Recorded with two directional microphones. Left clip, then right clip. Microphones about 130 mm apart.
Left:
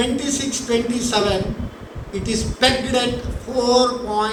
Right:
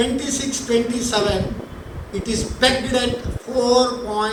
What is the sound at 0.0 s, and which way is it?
A man's voice, 50° left (ahead or behind).